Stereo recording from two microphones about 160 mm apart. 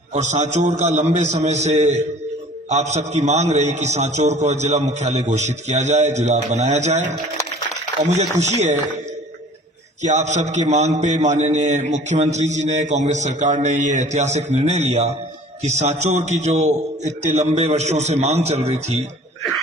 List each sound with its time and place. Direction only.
0.1 s a man's voice: 45° right (ahead or behind)
10.0 s a man's voice: 45° right (ahead or behind)